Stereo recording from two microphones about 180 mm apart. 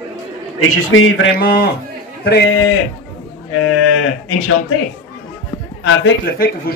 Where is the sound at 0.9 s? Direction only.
90° left; by 1.7 s 60° left (ahead or behind).